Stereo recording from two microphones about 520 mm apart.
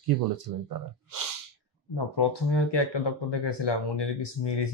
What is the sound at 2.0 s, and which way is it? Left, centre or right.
Speech, left.